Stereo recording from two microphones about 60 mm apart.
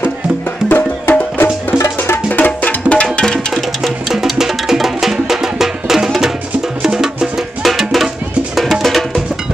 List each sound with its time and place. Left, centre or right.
0.7 s music: left; by 3.3 s centre
3.8 s music: centre